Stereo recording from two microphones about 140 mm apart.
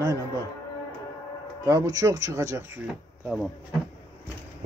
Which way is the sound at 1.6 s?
25° right (ahead or behind).